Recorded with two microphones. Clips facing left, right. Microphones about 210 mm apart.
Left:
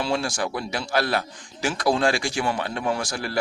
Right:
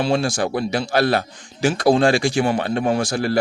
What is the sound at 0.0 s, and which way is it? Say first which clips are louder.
A man's voice: right 6 dB; 25° right (ahead or behind).